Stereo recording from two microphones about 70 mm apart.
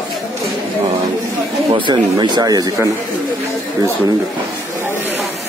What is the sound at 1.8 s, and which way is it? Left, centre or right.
Speech, right.